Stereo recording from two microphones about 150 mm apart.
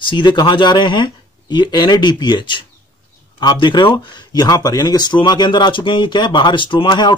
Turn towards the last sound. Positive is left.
turn(degrees=30)  # may be behind; listen again after turning